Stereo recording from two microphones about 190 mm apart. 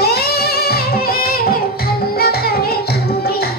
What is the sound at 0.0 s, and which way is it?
Music, 55° left (ahead or behind).